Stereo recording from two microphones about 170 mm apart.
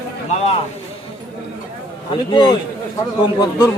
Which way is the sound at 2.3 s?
25° left (ahead or behind).